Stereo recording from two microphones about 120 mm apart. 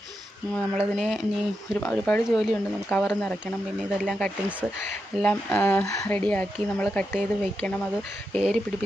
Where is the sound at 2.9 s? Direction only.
10° left (ahead or behind).